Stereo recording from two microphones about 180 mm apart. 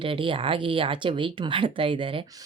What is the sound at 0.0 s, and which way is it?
Speech, 30° right (ahead or behind).